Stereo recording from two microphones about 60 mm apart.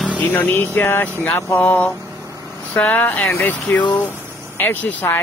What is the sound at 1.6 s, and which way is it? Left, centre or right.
Speech, left.